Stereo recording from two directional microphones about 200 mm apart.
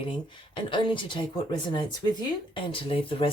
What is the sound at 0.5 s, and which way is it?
Speech, 25° left (ahead or behind).